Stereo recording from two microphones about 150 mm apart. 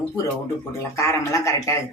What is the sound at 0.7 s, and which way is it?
Speech, 20° left (ahead or behind).